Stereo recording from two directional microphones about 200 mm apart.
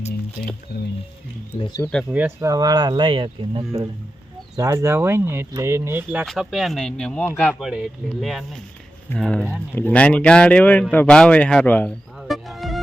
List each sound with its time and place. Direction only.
1.5 s speech: 25° left (ahead or behind)
1.8 s speech: 5° left (ahead or behind)
2.1 s speech: 15° right (ahead or behind)